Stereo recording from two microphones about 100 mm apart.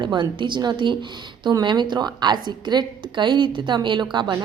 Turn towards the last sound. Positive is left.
turn(degrees=-50)  # may be behind; listen again after turning